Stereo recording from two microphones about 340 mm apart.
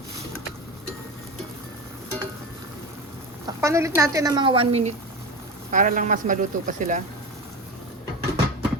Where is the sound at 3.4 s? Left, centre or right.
Centre.